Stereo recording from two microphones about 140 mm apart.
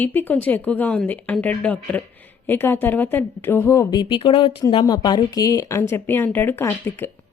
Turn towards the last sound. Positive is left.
turn(degrees=15)  # may be behind; listen again after turning